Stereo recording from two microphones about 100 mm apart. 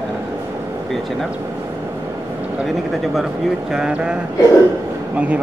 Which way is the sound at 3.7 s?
10° right (ahead or behind).